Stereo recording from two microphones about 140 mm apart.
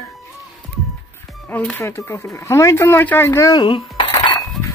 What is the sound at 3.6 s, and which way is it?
Coin, 35° left (ahead or behind).